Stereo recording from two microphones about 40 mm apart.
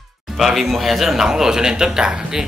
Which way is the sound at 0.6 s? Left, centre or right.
Centre.